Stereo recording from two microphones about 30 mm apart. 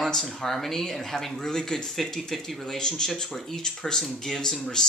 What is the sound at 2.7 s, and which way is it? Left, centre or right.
A woman's voice, left.